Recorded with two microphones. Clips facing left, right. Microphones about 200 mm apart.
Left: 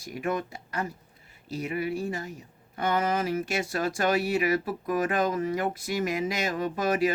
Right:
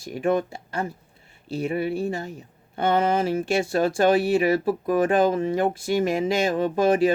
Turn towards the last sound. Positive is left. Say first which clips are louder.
# right 6 dB
turn(degrees=-30)  # may be behind; listen again after turning